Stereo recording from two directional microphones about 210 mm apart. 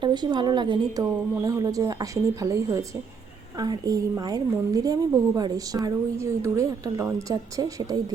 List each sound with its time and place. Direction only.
0.0 s a woman's voice: 20° right (ahead or behind)